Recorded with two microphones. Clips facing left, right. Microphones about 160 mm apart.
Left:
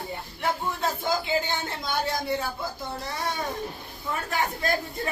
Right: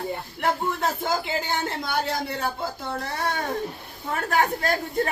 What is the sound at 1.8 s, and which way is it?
A woman's voice, 60° right (ahead or behind).